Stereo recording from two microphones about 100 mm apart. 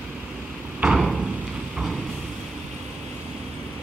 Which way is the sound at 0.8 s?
5° right (ahead or behind).